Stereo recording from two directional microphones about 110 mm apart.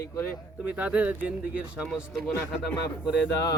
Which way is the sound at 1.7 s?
5° right (ahead or behind).